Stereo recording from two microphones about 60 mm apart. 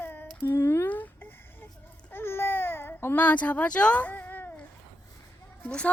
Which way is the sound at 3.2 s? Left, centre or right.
Left.